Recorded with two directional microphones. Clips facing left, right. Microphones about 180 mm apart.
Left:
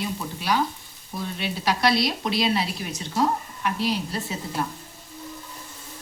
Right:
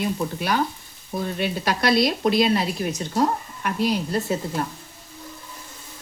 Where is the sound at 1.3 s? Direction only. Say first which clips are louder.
Even; 50° right (ahead or behind).